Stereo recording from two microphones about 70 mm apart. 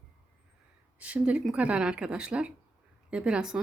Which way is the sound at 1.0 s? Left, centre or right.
Centre.